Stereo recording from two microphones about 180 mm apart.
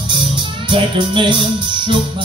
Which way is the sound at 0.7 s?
25° right (ahead or behind).